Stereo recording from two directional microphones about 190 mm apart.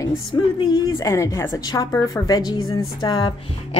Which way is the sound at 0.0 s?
25° left (ahead or behind).